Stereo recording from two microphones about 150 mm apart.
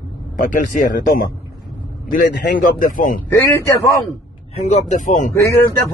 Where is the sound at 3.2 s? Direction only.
20° left (ahead or behind).